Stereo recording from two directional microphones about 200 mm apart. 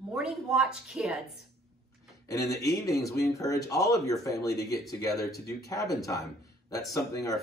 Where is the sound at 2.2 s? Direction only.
15° left (ahead or behind).